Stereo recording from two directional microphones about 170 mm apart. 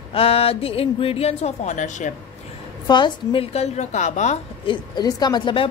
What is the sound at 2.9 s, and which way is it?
A woman's voice, 25° left (ahead or behind).